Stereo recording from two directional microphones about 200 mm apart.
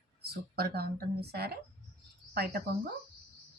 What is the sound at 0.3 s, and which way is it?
A woman's voice, 50° right (ahead or behind).